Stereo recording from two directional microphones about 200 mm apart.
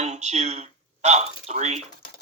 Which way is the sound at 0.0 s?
35° right (ahead or behind).